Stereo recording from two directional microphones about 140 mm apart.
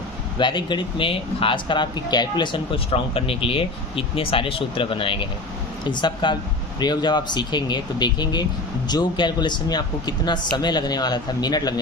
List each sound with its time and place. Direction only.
0.3 s speech: 35° left (ahead or behind)